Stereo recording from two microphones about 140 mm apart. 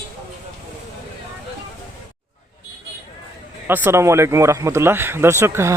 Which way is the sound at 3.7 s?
20° right (ahead or behind).